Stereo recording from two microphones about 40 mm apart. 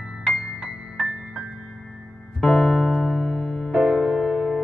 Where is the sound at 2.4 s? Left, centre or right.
Centre.